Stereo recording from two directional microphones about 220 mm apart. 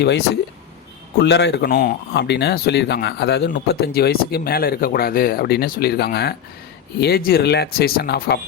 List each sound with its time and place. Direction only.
1.2 s speech: 50° left (ahead or behind)